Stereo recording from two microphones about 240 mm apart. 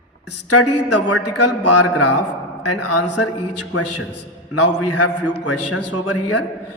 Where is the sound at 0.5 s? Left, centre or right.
Left.